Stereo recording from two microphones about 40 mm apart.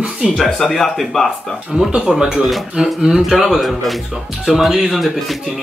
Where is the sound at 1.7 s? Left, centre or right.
Centre.